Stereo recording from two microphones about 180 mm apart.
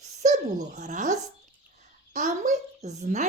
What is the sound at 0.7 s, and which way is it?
A woman's voice, 45° right (ahead or behind).